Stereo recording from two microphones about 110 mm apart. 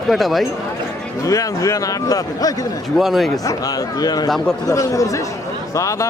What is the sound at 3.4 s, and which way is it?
A man's voice, 35° left (ahead or behind).